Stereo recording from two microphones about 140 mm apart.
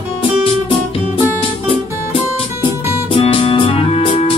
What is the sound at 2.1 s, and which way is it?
Music, 40° left (ahead or behind).